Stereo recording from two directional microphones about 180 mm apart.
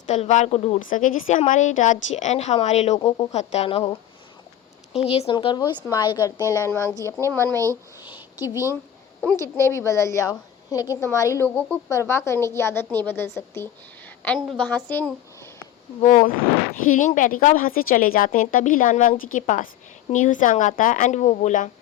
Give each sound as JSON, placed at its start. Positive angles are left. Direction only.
{"t": 0.1, "sound": "a woman's voice", "side_deg": 40}
{"t": 5.0, "sound": "a woman's voice", "side_deg": 35}
{"t": 7.6, "sound": "a sound", "side_deg": -15}
{"t": 9.3, "sound": "a woman's voice", "side_deg": 15}
{"t": 14.2, "sound": "a woman's voice", "side_deg": 5}
{"t": 16.0, "sound": "a woman's voice", "side_deg": 50}